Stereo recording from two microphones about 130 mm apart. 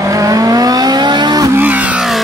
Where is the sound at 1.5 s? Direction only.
10° right (ahead or behind).